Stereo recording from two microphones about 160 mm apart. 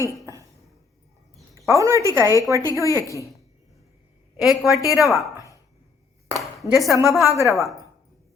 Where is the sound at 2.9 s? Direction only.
20° left (ahead or behind).